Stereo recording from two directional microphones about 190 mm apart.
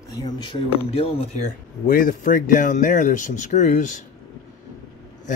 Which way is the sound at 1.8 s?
45° left (ahead or behind).